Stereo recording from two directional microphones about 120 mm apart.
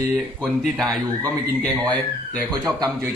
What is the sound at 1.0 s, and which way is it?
Speech, 25° right (ahead or behind).